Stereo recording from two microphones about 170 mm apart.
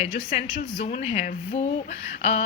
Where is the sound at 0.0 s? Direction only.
45° left (ahead or behind).